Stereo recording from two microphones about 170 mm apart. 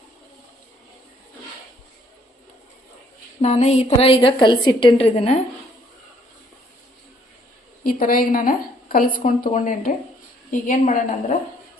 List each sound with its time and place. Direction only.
3.4 s a woman's voice: 40° left (ahead or behind)
7.9 s a woman's voice: 55° left (ahead or behind)